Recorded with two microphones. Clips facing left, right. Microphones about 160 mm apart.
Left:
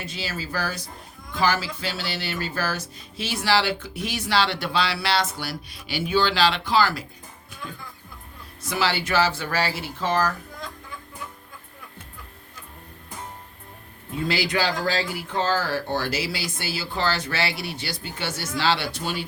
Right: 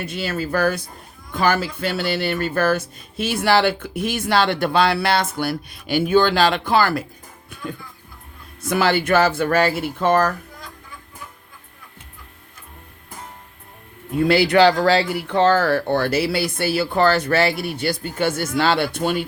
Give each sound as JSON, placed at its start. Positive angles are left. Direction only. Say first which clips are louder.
{"t": 0.0, "sound": "speech", "louder": "right 7 dB", "side_deg": -60}
{"t": 8.6, "sound": "speech", "louder": "right 7 dB", "side_deg": -50}
{"t": 14.3, "sound": "speech", "louder": "right 11 dB", "side_deg": -60}